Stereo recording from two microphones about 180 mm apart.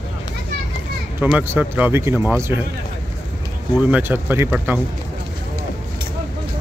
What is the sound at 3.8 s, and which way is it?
Speech, 10° right (ahead or behind).